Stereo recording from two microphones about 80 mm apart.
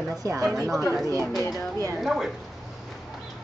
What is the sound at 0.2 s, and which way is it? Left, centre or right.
Speech, right.